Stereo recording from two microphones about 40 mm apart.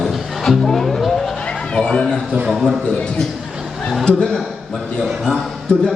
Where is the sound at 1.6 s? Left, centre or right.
Left.